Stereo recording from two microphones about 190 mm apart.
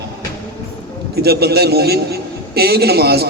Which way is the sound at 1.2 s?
55° right (ahead or behind).